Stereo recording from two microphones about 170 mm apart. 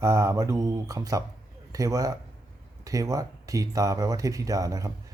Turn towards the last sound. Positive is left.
turn(degrees=-20)  # may be behind; listen again after turning